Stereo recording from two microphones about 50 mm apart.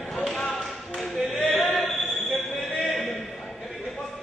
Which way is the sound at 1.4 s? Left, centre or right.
Left.